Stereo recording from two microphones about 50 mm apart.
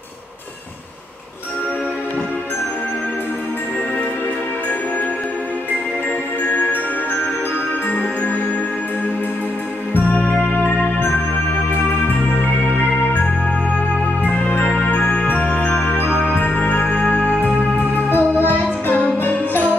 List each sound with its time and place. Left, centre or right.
6.4 s music: left
7.9 s music: left
10.1 s music: left
14.2 s music: left
16.3 s music: left
18.1 s music: left